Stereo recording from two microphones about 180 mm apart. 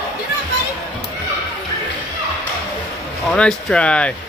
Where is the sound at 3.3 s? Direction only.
5° left (ahead or behind).